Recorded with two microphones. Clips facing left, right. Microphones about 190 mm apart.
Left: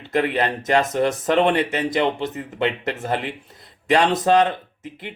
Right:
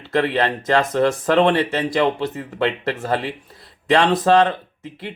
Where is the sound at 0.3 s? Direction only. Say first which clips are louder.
Right 1 dB; 20° left (ahead or behind).